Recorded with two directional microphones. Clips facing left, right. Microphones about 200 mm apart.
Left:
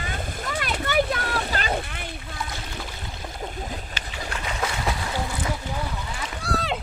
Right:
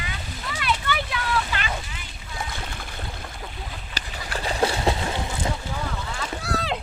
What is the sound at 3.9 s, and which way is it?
Boat, 35° right (ahead or behind).